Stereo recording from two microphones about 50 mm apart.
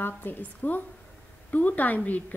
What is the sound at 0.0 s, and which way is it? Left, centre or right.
Speech, left.